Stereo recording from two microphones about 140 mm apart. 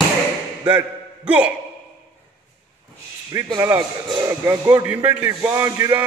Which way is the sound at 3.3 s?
20° right (ahead or behind).